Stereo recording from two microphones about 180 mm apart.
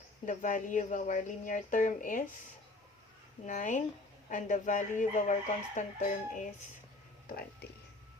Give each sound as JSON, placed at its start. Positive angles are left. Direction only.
{"t": 0.3, "sound": "speech", "side_deg": 45}
{"t": 3.4, "sound": "speech", "side_deg": 45}